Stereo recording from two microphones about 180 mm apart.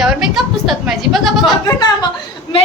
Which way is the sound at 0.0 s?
Centre (ahead or behind).